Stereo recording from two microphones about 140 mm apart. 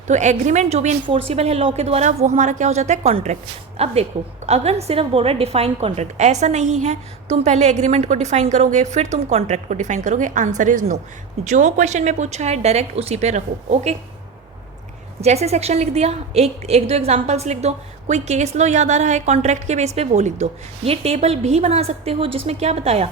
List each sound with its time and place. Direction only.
0.1 s a woman's voice: 60° right (ahead or behind)
15.2 s a woman's voice: 50° right (ahead or behind)